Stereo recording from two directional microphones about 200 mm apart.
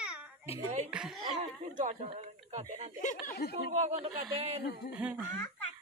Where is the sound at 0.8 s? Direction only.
5° right (ahead or behind).